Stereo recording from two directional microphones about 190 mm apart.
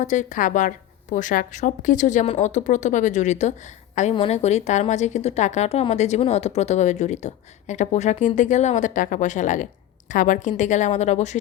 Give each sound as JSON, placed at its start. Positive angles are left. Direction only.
{"t": 0.0, "sound": "a woman's voice", "side_deg": 40}